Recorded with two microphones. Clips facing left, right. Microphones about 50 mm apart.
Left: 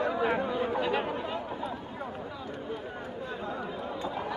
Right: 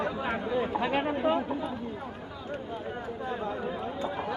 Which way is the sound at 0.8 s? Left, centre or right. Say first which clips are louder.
Right 3 dB; right.